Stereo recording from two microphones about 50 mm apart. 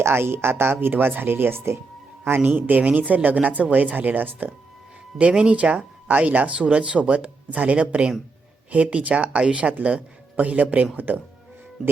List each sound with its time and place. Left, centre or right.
0.0 s speech: right
2.4 s speech: right
5.4 s speech: right